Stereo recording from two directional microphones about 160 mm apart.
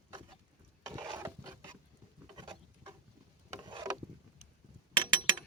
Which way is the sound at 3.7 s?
30° right (ahead or behind).